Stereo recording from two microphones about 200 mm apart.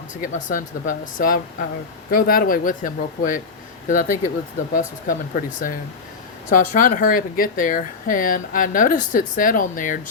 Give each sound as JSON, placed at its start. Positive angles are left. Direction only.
{"t": 0.2, "sound": "speech", "side_deg": 40}